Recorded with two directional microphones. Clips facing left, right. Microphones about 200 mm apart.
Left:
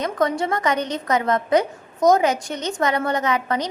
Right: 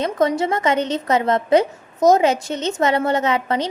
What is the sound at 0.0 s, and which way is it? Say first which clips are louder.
A woman's voice: right 3 dB; 25° right (ahead or behind).